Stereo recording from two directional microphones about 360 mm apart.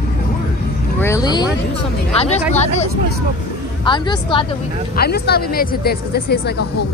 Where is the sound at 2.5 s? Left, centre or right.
Centre.